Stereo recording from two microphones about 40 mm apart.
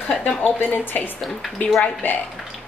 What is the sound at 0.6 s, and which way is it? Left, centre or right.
A woman's voice, left.